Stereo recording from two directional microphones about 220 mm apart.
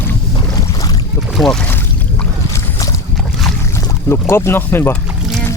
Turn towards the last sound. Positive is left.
turn(degrees=10)  # may be behind; listen again after turning